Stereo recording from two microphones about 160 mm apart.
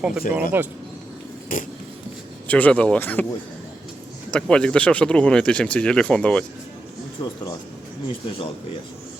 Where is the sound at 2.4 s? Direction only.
10° left (ahead or behind).